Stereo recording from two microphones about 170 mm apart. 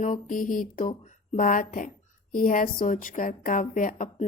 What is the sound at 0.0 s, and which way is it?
Speech, 50° left (ahead or behind).